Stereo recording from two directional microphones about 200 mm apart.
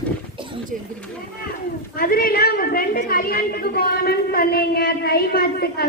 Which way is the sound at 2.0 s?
45° left (ahead or behind).